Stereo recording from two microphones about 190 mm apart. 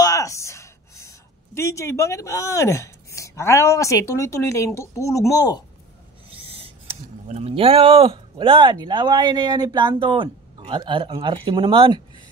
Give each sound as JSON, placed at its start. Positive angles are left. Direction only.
{"t": 0.0, "sound": "a woman's voice", "side_deg": 15}
{"t": 6.4, "sound": "speech", "side_deg": -30}